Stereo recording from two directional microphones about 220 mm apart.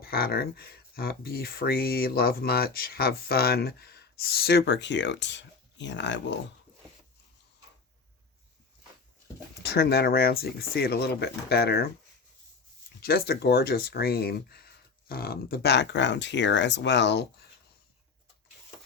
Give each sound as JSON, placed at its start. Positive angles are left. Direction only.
{"t": 0.0, "sound": "speech", "side_deg": 45}
{"t": 9.6, "sound": "speech", "side_deg": 45}
{"t": 13.0, "sound": "speech", "side_deg": 45}